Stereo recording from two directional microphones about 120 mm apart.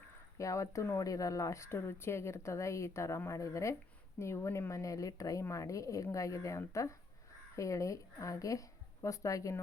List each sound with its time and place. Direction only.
0.3 s a woman's voice: 25° left (ahead or behind)